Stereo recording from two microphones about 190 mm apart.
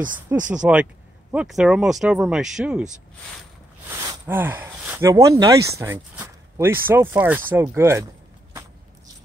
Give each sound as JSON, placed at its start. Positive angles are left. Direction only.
{"t": 0.4, "sound": "speech", "side_deg": -40}
{"t": 1.3, "sound": "speech", "side_deg": -5}
{"t": 3.9, "sound": "speech", "side_deg": -15}